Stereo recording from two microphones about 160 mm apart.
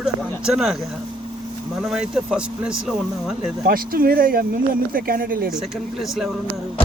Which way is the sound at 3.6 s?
65° right (ahead or behind).